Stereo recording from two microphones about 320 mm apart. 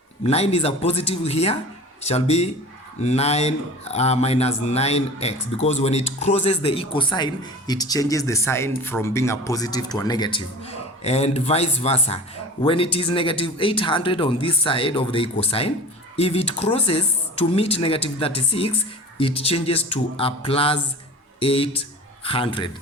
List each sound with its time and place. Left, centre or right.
0.2 s speech: centre